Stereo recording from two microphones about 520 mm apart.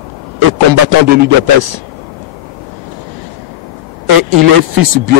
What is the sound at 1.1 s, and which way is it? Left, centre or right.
Speech, right.